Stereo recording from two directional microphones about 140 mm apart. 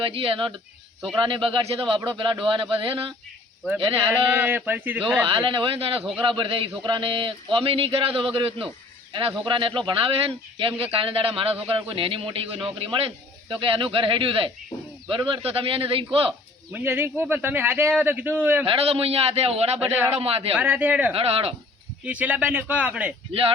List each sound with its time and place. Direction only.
0.0 s a man's voice: 40° right (ahead or behind)
4.1 s speech: 15° right (ahead or behind)
5.3 s a man's voice: 35° right (ahead or behind)
16.7 s speech: 15° right (ahead or behind)
18.6 s a man's voice: 40° right (ahead or behind)
19.8 s speech: 10° right (ahead or behind)
20.1 s a man's voice: 45° right (ahead or behind)
20.6 s speech: 10° right (ahead or behind)
21.1 s a man's voice: 45° right (ahead or behind)
22.0 s speech: 10° right (ahead or behind)